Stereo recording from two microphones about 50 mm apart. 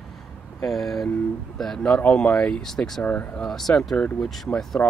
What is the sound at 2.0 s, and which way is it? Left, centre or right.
Speech, left.